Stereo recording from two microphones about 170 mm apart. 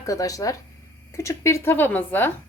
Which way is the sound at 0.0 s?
20° left (ahead or behind).